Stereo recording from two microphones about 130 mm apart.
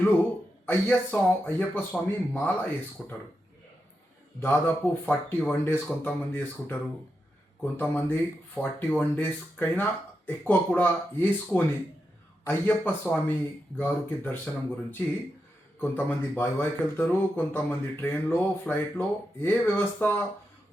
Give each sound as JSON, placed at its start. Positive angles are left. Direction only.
{"t": 0.6, "sound": "speech", "side_deg": 15}
{"t": 4.4, "sound": "speech", "side_deg": 15}